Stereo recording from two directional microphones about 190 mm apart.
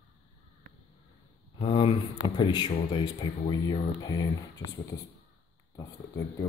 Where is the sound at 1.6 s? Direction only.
25° left (ahead or behind).